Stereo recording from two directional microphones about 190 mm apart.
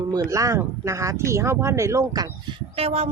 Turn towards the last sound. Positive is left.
turn(degrees=-35)  # may be behind; listen again after turning